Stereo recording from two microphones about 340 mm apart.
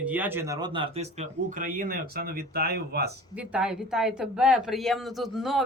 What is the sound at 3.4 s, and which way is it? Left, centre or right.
Speech, centre.